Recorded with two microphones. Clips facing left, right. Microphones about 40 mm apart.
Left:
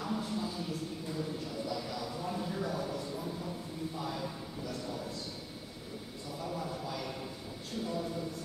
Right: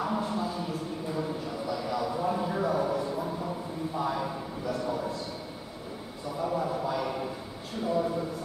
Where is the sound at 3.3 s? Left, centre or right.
Right.